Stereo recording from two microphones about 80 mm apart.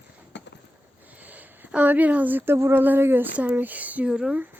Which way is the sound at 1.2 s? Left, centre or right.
Right.